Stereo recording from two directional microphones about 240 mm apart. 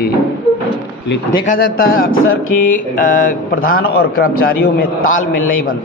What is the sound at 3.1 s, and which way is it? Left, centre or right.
A man's voice, left.